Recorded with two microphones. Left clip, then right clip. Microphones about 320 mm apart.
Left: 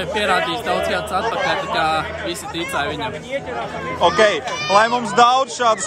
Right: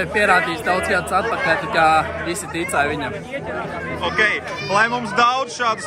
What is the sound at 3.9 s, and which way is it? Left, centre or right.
Speech, centre.